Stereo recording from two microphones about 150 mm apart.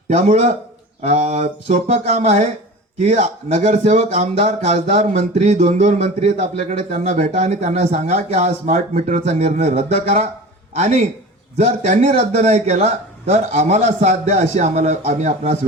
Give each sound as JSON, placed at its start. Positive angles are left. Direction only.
{"t": 0.1, "sound": "speech", "side_deg": -50}